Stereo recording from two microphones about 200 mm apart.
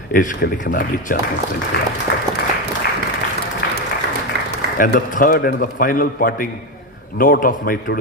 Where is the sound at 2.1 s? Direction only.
55° left (ahead or behind).